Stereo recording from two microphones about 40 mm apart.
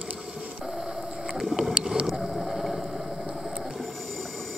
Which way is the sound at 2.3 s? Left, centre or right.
Centre.